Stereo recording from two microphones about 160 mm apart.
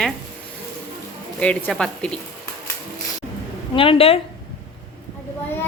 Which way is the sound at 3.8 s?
35° left (ahead or behind).